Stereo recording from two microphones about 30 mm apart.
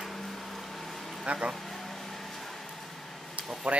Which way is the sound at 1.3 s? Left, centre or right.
Right.